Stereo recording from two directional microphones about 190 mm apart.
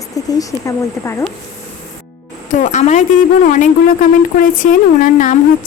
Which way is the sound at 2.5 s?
40° left (ahead or behind).